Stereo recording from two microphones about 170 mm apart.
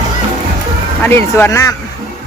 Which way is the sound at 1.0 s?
15° left (ahead or behind).